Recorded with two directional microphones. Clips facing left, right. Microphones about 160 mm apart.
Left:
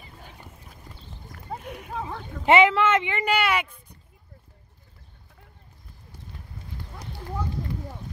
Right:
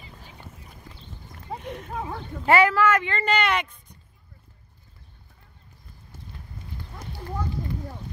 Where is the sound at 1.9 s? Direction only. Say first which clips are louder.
Even; 10° right (ahead or behind).